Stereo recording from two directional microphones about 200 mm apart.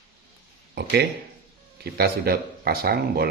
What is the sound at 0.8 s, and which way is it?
Speech, 55° right (ahead or behind).